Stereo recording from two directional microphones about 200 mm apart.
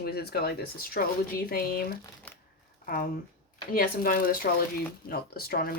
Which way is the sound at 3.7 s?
45° left (ahead or behind).